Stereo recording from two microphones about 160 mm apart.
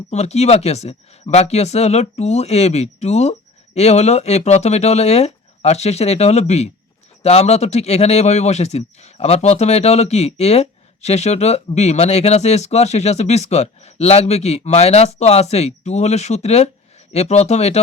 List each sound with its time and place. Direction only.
0.1 s speech: 45° left (ahead or behind)